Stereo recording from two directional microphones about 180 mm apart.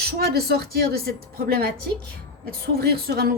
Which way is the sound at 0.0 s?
60° right (ahead or behind).